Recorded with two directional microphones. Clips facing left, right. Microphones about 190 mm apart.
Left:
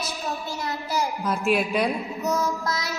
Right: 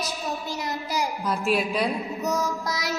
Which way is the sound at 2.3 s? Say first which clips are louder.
Left 2 dB; 15° right (ahead or behind).